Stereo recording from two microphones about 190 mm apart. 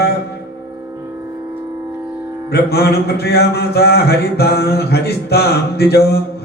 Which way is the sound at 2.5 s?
60° left (ahead or behind).